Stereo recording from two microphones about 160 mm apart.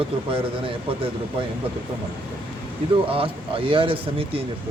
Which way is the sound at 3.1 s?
35° right (ahead or behind).